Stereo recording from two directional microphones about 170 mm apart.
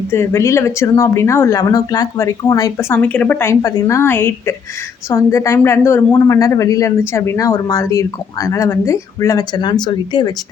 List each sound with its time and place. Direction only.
0.1 s a woman's voice: 15° left (ahead or behind)